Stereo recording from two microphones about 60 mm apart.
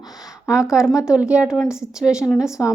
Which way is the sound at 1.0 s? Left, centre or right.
Centre.